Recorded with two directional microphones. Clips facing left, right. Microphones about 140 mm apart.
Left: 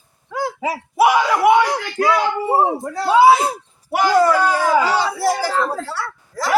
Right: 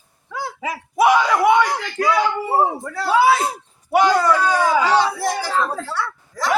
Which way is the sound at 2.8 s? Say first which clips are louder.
Left 4 dB; 20° left (ahead or behind).